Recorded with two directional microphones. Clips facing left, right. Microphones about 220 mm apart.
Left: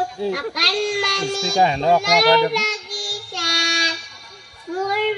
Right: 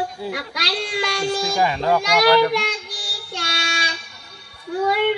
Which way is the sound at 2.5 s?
45° left (ahead or behind).